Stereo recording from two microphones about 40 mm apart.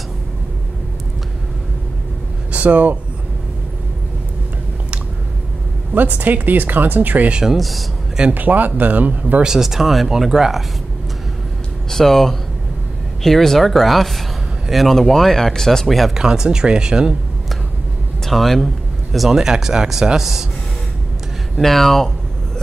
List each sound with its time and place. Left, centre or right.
2.5 s speech: right
5.9 s speech: right
7.5 s speech: centre
8.4 s speech: right
9.6 s speech: centre
11.9 s speech: centre
16.2 s speech: centre
18.2 s speech: centre
19.3 s speech: centre
21.5 s speech: centre